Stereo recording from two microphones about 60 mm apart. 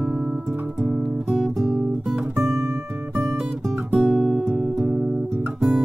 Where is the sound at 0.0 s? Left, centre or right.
Centre.